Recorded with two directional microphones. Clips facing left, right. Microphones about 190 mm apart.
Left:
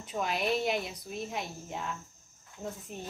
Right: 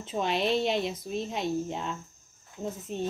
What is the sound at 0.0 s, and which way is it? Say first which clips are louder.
Speech: right 4 dB; 25° right (ahead or behind).